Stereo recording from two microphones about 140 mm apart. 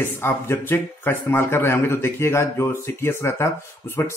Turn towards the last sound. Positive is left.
turn(degrees=15)  # may be behind; listen again after turning